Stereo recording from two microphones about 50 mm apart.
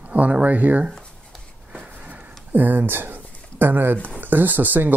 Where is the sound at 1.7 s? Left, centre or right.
Right.